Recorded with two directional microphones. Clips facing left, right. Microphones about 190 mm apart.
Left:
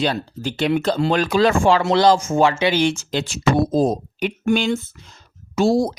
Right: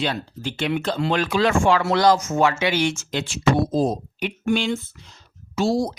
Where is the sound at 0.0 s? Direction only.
40° left (ahead or behind).